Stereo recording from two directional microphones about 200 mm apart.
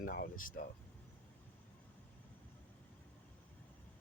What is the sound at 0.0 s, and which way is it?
Speech, 45° left (ahead or behind).